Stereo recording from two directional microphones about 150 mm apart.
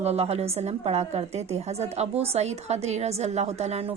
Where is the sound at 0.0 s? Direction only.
45° right (ahead or behind).